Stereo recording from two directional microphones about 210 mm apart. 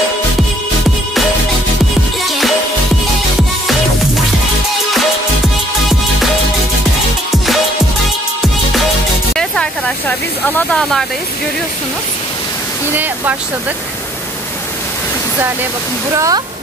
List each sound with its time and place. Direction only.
9.3 s hiss: 5° left (ahead or behind)
10.7 s speech: centre (ahead or behind)
12.9 s speech: 10° right (ahead or behind)
16.2 s speech: 15° right (ahead or behind)